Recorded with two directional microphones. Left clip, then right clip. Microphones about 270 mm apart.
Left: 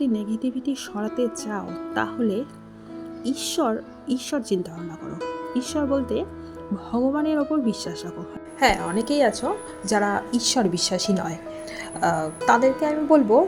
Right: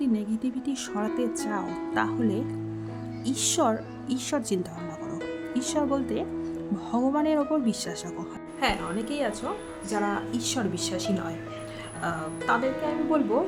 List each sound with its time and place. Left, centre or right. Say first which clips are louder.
0.0 s speech: left 3 dB; centre
8.6 s a woman's voice: left 7 dB; centre